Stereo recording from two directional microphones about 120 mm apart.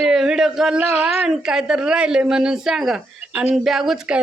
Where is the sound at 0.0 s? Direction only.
5° right (ahead or behind).